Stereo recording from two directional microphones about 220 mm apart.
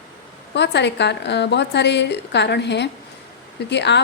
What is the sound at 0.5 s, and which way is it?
A woman's voice, 50° left (ahead or behind).